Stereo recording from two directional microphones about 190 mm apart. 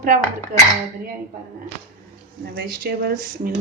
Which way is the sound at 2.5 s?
55° right (ahead or behind).